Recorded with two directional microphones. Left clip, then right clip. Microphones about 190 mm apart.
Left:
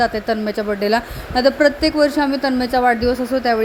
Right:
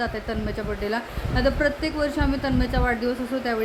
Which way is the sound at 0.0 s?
35° left (ahead or behind).